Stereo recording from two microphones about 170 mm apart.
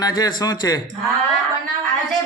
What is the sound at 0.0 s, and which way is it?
Speech, 25° left (ahead or behind).